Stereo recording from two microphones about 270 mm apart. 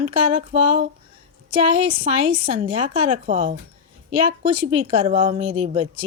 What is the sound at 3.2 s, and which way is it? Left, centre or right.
Speech, right.